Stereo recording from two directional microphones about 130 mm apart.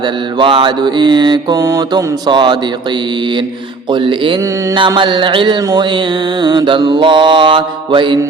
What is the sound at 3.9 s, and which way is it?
Mantra, 40° right (ahead or behind).